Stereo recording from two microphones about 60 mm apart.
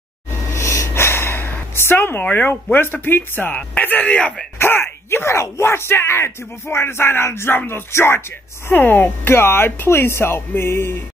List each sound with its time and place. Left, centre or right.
0.6 s a sound: left
3.5 s speech: left
4.6 s speech: left